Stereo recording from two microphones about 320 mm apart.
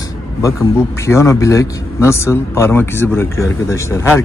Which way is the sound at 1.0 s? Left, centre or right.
Centre.